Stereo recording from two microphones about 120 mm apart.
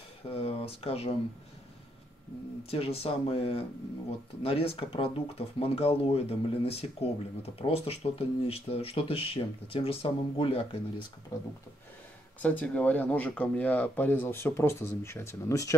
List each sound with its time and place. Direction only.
0.3 s speech: 55° left (ahead or behind)
2.7 s speech: 55° left (ahead or behind)
12.4 s speech: 10° left (ahead or behind)